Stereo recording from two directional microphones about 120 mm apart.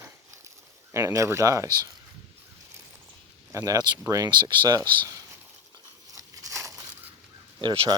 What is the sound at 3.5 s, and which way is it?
Speech, 25° right (ahead or behind).